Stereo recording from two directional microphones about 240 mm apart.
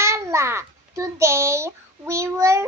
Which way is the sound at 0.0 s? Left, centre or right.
Centre.